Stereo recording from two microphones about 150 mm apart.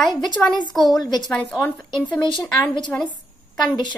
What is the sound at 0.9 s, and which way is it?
Speech, 30° left (ahead or behind).